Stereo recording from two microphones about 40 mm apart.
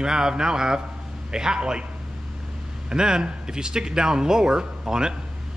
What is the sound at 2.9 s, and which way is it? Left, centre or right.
Speech, centre.